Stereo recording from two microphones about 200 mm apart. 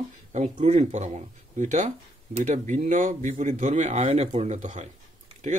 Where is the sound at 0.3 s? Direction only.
35° right (ahead or behind).